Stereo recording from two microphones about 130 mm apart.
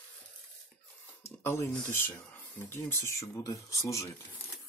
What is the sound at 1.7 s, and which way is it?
Speech, 5° left (ahead or behind).